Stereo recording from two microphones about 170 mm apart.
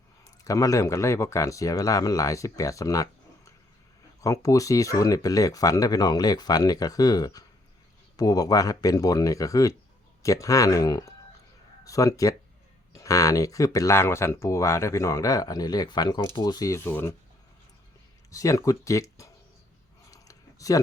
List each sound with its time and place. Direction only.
0.4 s speech: 20° left (ahead or behind)
18.3 s speech: 20° left (ahead or behind)
20.1 s a sound: 20° left (ahead or behind)